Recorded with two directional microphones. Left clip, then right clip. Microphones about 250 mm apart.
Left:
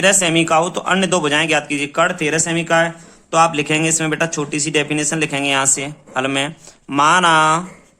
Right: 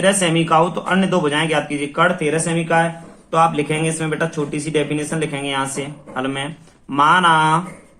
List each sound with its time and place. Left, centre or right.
0.0 s speech: left